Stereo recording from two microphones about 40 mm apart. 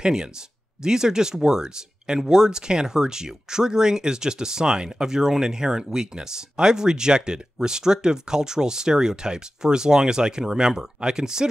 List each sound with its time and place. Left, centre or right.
0.0 s speech: centre